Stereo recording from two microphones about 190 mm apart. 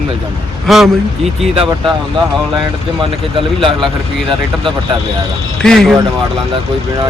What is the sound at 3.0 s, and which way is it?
Speech, 25° right (ahead or behind).